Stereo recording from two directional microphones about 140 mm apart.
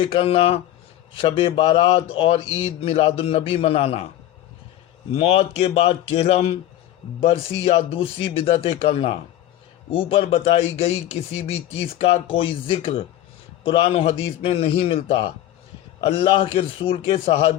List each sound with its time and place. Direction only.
0.0 s a man's voice: 40° left (ahead or behind)
5.1 s a man's voice: 45° left (ahead or behind)